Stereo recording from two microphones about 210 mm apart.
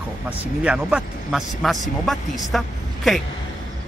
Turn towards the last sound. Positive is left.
turn(degrees=0)  # may be behind; listen again after turning